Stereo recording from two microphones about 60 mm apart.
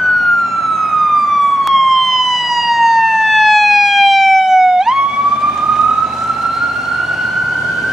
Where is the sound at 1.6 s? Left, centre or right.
Centre.